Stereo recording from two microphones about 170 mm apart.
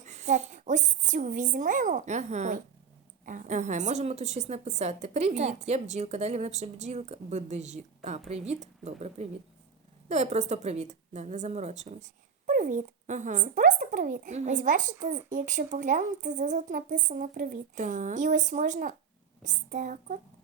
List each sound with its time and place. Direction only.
0.0 s a woman's voice: 45° right (ahead or behind)